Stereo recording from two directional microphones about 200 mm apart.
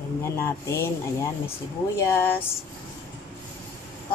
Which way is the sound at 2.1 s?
10° left (ahead or behind).